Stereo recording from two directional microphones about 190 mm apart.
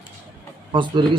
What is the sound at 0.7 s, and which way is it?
Speech, 25° right (ahead or behind).